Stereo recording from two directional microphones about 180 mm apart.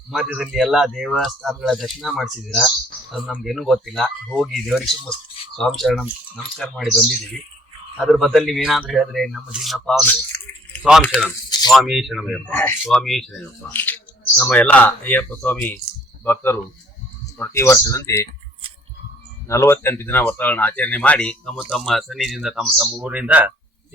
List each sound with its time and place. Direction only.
0.1 s speech: centre (ahead or behind)
11.7 s speech: centre (ahead or behind)
12.5 s speech: 10° left (ahead or behind)
19.5 s speech: 15° left (ahead or behind); by 23.5 s 10° right (ahead or behind)